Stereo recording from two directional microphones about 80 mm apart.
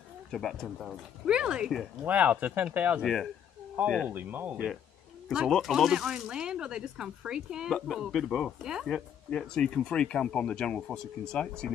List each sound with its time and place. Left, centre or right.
0.3 s speech: centre
1.2 s speech: centre
3.0 s speech: centre
3.8 s speech: right
5.5 s speech: centre
7.7 s speech: centre